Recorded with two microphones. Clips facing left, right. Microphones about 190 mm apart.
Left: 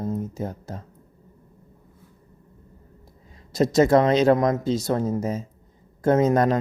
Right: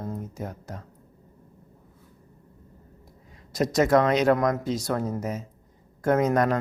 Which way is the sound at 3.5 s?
25° left (ahead or behind).